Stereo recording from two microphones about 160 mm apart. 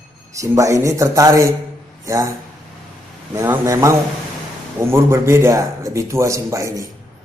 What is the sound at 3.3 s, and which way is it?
A man's voice, 20° right (ahead or behind).